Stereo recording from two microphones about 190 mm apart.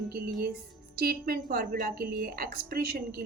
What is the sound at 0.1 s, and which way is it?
A woman's voice, 55° right (ahead or behind).